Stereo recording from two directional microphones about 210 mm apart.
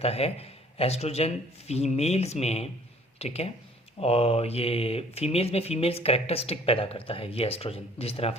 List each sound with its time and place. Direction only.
0.0 s speech: 30° left (ahead or behind)